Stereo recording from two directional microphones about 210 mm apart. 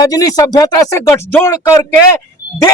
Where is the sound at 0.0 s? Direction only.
15° left (ahead or behind).